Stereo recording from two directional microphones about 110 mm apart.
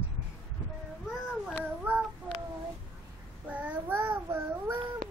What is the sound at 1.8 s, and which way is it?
Child singing, 15° right (ahead or behind).